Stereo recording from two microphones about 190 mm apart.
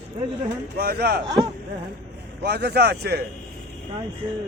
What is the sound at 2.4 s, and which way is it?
Speech, 60° right (ahead or behind).